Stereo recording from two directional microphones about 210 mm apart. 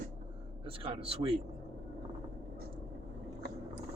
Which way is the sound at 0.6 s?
25° right (ahead or behind).